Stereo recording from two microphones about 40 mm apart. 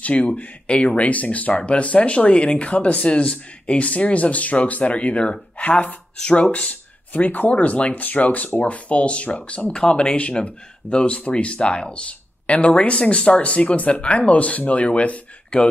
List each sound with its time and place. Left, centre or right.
0.0 s speech: left
5.6 s speech: left
6.7 s speech: left